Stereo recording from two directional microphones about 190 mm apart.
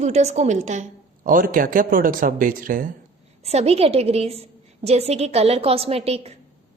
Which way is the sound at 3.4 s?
35° right (ahead or behind).